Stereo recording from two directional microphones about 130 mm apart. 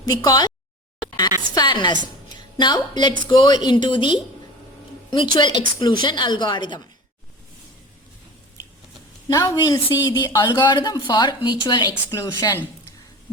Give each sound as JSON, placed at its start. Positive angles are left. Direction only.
{"t": 0.1, "sound": "a woman's voice", "side_deg": 30}
{"t": 1.5, "sound": "a woman's voice", "side_deg": 35}
{"t": 9.3, "sound": "a woman's voice", "side_deg": 25}